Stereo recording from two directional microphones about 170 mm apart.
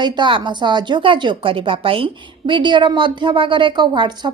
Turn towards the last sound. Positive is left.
turn(degrees=-25)  # may be behind; listen again after turning